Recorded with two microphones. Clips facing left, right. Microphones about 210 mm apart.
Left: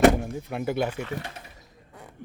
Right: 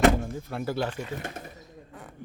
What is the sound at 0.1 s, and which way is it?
Door, 15° left (ahead or behind).